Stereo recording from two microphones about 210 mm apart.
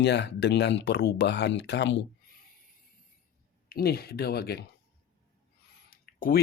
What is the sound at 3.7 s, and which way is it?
Speech, 45° left (ahead or behind).